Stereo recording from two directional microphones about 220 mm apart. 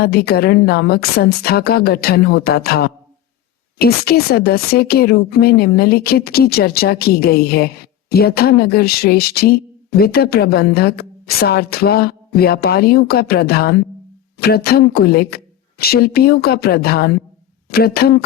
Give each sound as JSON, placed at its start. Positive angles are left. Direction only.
{"t": 0.0, "sound": "speech", "side_deg": 45}